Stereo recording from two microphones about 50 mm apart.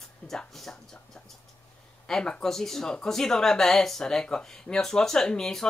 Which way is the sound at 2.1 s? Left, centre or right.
Centre.